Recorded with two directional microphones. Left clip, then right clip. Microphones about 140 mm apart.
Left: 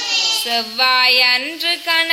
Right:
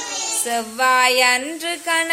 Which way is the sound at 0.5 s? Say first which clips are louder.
Right 1 dB; 25° right (ahead or behind).